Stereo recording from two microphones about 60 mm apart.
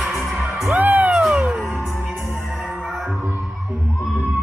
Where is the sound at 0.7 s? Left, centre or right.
Right.